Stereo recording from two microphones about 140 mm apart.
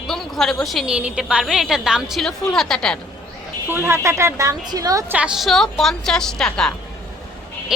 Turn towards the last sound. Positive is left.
turn(degrees=5)  # may be behind; listen again after turning